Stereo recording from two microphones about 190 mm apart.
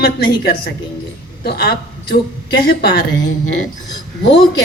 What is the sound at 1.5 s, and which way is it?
A woman's voice, 55° left (ahead or behind).